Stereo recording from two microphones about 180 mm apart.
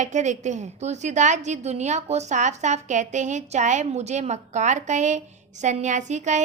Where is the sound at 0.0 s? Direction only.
40° right (ahead or behind).